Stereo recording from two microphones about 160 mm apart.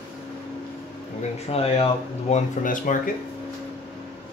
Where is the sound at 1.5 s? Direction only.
35° left (ahead or behind); by 3.0 s 55° left (ahead or behind).